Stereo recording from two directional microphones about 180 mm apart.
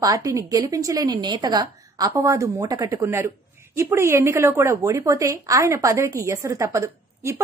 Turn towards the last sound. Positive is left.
turn(degrees=-15)  # may be behind; listen again after turning